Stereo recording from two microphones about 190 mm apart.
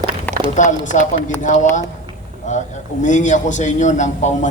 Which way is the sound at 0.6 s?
40° left (ahead or behind).